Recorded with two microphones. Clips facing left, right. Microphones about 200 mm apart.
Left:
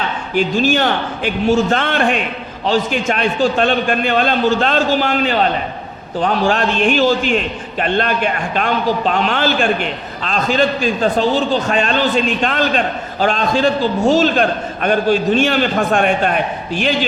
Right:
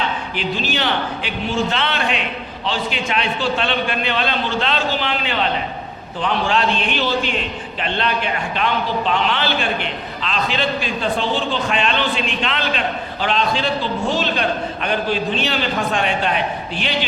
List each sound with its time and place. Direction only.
0.3 s a man's voice: 45° left (ahead or behind)